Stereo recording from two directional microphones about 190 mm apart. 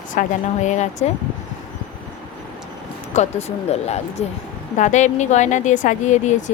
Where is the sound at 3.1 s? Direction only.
35° left (ahead or behind).